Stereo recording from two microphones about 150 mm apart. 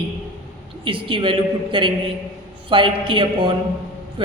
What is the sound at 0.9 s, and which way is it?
A woman's voice, 35° right (ahead or behind).